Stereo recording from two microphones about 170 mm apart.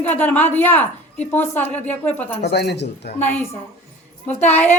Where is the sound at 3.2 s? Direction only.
10° left (ahead or behind).